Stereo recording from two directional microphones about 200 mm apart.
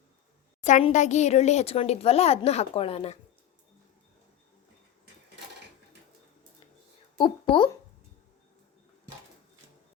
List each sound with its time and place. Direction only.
0.6 s speech: 35° left (ahead or behind)
7.2 s a woman's voice: 25° left (ahead or behind)